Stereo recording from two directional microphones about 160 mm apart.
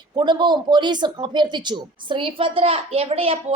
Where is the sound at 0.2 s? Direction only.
30° right (ahead or behind).